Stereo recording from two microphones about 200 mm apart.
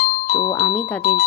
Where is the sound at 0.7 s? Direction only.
45° left (ahead or behind).